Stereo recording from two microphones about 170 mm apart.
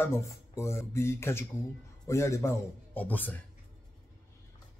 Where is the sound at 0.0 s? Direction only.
15° left (ahead or behind).